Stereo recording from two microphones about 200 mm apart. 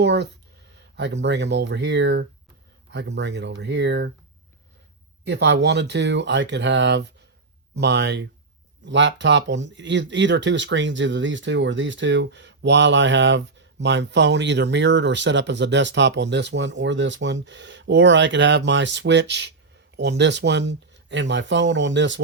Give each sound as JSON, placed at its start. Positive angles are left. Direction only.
{"t": 0.0, "sound": "a sound", "side_deg": -60}
{"t": 0.9, "sound": "speech", "side_deg": -60}
{"t": 5.2, "sound": "speech", "side_deg": -60}